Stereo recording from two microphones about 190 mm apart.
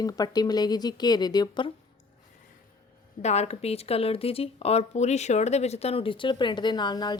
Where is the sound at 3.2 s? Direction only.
35° left (ahead or behind).